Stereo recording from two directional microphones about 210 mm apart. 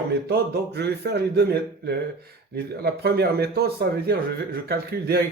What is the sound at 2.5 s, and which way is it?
A man's voice, 50° right (ahead or behind).